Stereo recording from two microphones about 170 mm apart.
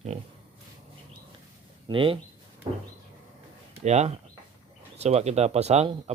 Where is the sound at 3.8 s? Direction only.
40° right (ahead or behind).